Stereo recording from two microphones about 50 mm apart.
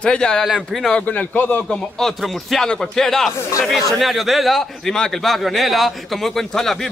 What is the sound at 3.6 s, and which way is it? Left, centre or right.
Speech, centre.